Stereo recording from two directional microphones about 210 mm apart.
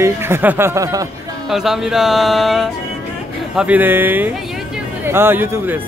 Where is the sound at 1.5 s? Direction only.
Centre (ahead or behind).